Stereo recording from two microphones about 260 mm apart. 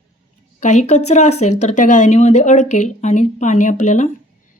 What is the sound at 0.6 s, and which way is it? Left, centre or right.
Speech, left.